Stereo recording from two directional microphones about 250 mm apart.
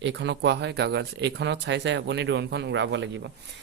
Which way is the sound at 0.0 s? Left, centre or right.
Right.